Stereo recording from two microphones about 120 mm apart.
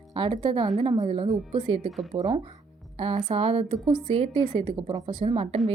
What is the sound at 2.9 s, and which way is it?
A woman's voice, 50° right (ahead or behind).